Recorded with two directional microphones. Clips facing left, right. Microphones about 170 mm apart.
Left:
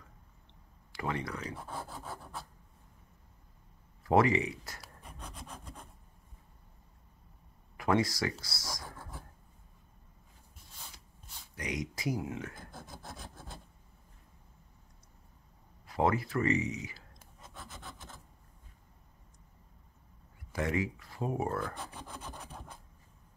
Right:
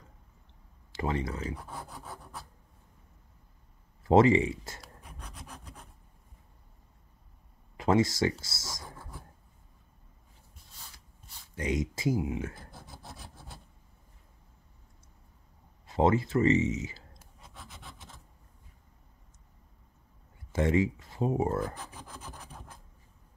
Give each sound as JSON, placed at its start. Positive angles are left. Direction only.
{"t": 0.9, "sound": "speech", "side_deg": -25}
{"t": 1.9, "sound": "rub", "side_deg": 0}
{"t": 4.0, "sound": "speech", "side_deg": -25}
{"t": 4.8, "sound": "rub", "side_deg": 0}
{"t": 7.7, "sound": "speech", "side_deg": -25}
{"t": 11.5, "sound": "speech", "side_deg": -25}
{"t": 12.9, "sound": "rub", "side_deg": -5}
{"t": 15.9, "sound": "speech", "side_deg": -25}
{"t": 17.2, "sound": "rub", "side_deg": 0}
{"t": 20.5, "sound": "speech", "side_deg": -25}
{"t": 21.7, "sound": "rub", "side_deg": -5}